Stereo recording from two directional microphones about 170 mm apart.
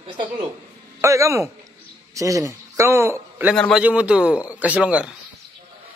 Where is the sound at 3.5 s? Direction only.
5° left (ahead or behind).